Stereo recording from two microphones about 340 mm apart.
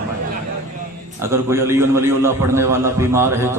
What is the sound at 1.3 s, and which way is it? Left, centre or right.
A man's voice, centre.